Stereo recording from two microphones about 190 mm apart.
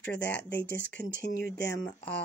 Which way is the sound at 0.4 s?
65° left (ahead or behind).